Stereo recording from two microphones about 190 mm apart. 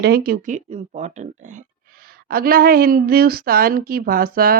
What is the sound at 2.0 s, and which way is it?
Speech, 50° right (ahead or behind).